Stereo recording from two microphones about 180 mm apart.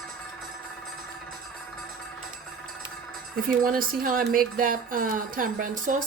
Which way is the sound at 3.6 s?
50° right (ahead or behind).